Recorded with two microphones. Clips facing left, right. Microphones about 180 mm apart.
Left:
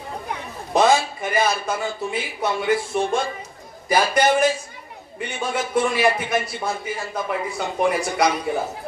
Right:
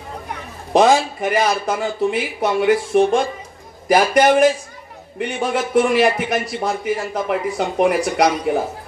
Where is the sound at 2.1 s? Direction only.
70° right (ahead or behind).